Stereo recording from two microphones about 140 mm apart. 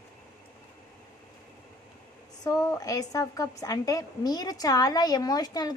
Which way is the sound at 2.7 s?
25° left (ahead or behind).